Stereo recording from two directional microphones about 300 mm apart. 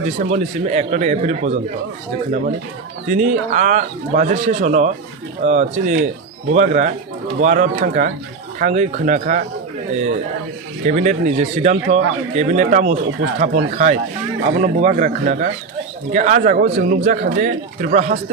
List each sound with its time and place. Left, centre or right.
0.2 s speech: right
3.1 s speech: right